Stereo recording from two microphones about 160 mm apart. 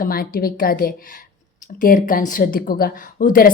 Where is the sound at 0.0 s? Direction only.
65° left (ahead or behind).